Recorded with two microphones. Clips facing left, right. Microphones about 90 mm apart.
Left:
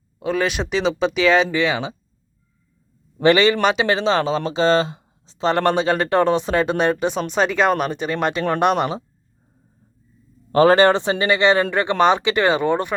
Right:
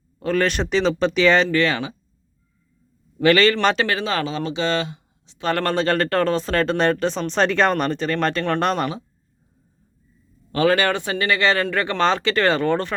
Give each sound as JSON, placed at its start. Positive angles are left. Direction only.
{"t": 0.2, "sound": "speech", "side_deg": 10}
{"t": 3.2, "sound": "speech", "side_deg": 20}
{"t": 3.8, "sound": "speech", "side_deg": 25}
{"t": 5.5, "sound": "speech", "side_deg": 20}
{"t": 10.5, "sound": "speech", "side_deg": 35}